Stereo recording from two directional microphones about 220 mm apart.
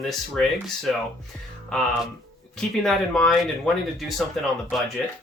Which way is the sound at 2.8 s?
Centre (ahead or behind).